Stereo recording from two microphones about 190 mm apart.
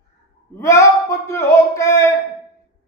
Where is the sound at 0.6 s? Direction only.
15° left (ahead or behind).